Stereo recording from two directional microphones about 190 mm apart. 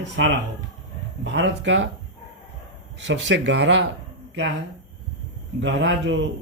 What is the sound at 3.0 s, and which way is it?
Speech, 70° right (ahead or behind).